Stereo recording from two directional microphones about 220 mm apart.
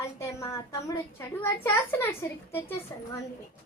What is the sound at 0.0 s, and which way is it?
A child's voice, 10° left (ahead or behind).